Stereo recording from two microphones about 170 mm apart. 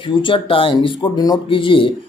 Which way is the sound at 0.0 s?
30° left (ahead or behind).